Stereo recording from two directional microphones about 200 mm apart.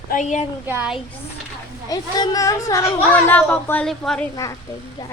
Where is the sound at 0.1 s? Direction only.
35° left (ahead or behind).